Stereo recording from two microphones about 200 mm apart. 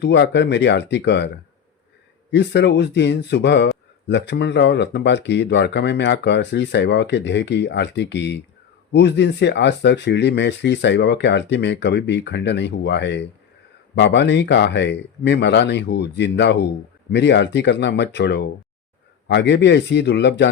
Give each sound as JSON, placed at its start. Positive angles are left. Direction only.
{"t": 0.0, "sound": "speech", "side_deg": 60}
{"t": 2.3, "sound": "speech", "side_deg": 60}